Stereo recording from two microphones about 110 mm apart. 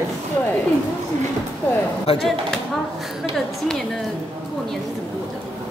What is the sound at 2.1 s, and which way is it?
Speech, 60° left (ahead or behind).